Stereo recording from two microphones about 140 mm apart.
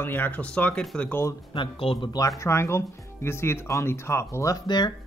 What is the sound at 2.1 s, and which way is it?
Speech, 20° left (ahead or behind).